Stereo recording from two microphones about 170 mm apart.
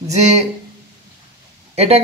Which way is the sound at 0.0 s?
40° right (ahead or behind).